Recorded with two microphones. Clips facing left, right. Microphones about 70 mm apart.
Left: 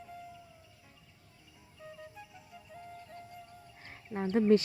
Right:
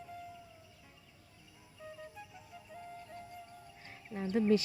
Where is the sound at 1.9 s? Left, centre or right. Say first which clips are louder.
Even; centre.